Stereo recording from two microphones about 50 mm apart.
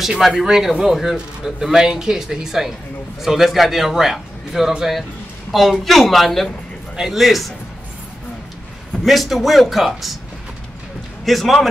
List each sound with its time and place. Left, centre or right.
0.4 s a man's voice: centre
9.0 s a man's voice: centre
11.2 s a man's voice: centre